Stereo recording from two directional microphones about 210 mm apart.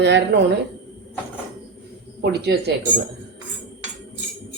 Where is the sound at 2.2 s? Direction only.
50° right (ahead or behind).